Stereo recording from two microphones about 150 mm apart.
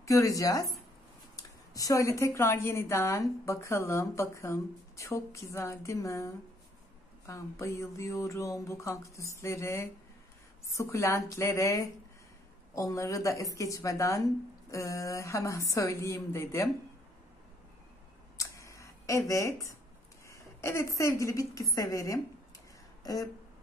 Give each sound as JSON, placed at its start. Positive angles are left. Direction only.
{"t": 0.0, "sound": "a woman's voice", "side_deg": 20}
{"t": 18.4, "sound": "a sound", "side_deg": 20}
{"t": 20.2, "sound": "a woman's voice", "side_deg": 20}